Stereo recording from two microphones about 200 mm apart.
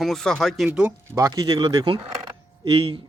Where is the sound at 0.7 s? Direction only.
10° right (ahead or behind).